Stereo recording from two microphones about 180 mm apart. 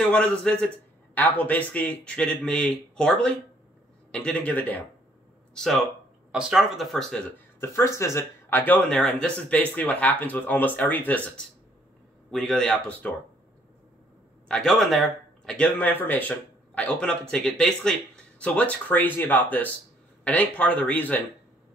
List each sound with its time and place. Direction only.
0.0 s a man's voice: 5° left (ahead or behind)
14.5 s speech: centre (ahead or behind)